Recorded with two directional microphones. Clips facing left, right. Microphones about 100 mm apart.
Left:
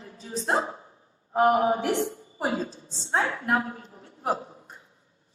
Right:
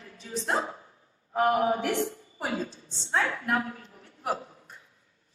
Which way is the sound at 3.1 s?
25° left (ahead or behind).